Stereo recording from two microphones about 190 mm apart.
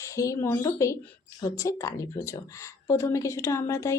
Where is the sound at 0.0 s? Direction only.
15° left (ahead or behind).